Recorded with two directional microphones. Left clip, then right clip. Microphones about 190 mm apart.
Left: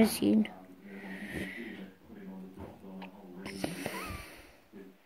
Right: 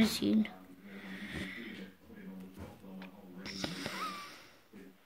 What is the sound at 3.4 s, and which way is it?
Wheeze, 5° right (ahead or behind).